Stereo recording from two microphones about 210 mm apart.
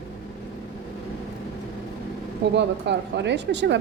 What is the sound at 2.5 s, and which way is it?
A woman's voice, 55° right (ahead or behind).